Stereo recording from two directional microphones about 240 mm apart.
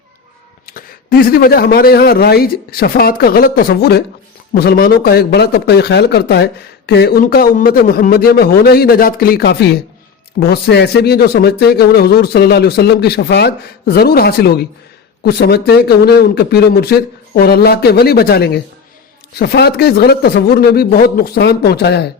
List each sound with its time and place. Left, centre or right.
0.6 s a man's voice: left